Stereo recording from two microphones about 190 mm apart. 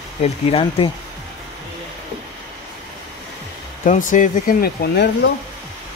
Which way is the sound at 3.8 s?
40° left (ahead or behind).